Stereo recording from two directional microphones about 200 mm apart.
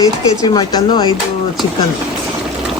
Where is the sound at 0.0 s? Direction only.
20° left (ahead or behind).